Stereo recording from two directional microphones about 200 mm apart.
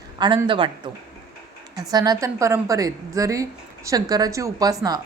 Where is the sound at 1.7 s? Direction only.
20° right (ahead or behind).